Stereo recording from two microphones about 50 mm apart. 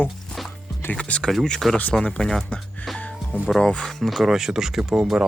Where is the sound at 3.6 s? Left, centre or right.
Left.